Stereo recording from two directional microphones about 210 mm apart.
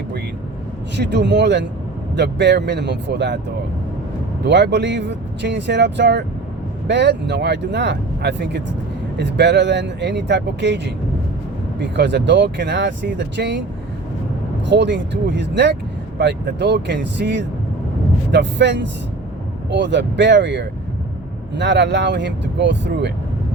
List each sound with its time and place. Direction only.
0.9 s speech: 55° right (ahead or behind)
4.4 s speech: 55° right (ahead or behind)
14.7 s speech: 55° right (ahead or behind)